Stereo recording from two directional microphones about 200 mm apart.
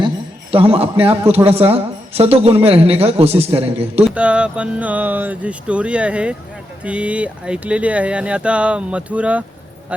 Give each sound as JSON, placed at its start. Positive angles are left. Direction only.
{"t": 0.5, "sound": "a woman's voice", "side_deg": -30}
{"t": 3.9, "sound": "speech", "side_deg": -5}